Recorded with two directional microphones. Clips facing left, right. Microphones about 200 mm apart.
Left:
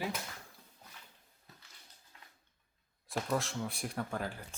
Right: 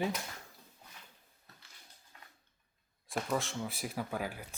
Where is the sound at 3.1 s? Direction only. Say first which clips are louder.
Even; centre (ahead or behind).